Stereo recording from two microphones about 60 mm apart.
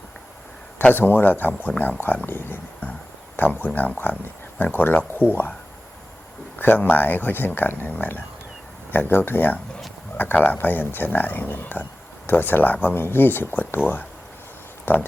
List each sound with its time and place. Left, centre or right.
0.8 s speech: left
6.6 s speech: left
14.9 s speech: left